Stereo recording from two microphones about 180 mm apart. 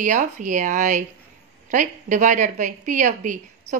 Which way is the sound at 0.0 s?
45° right (ahead or behind).